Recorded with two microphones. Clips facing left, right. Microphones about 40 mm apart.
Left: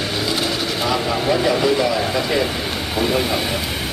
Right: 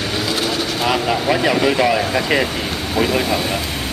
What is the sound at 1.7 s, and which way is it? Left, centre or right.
Speech, right.